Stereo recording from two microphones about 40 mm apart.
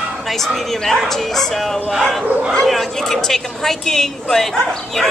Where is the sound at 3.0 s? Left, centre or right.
Centre.